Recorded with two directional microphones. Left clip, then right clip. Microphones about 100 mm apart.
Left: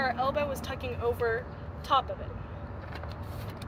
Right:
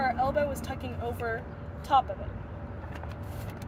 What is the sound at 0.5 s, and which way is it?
Speech, 25° right (ahead or behind).